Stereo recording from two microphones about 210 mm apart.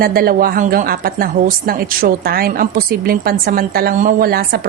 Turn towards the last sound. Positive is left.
turn(degrees=-45)  # may be behind; listen again after turning